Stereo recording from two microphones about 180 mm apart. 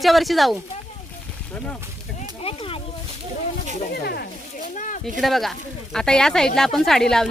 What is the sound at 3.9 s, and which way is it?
Snake, 60° left (ahead or behind).